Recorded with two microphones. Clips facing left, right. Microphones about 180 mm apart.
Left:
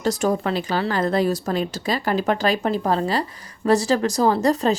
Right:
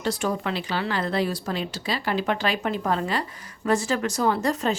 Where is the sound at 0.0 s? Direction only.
45° left (ahead or behind).